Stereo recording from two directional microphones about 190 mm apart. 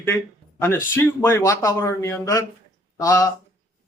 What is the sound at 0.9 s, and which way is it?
A man's voice, 15° left (ahead or behind).